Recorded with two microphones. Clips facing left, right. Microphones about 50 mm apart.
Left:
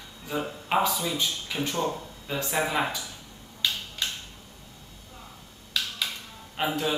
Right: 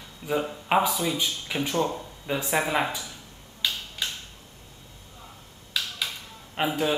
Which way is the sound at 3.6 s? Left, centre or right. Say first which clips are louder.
Even; centre.